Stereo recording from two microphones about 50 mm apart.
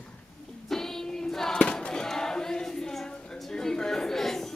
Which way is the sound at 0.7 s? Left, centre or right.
Centre.